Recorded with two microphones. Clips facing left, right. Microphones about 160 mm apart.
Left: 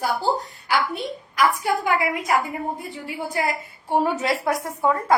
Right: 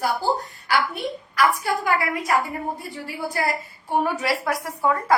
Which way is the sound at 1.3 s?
20° left (ahead or behind).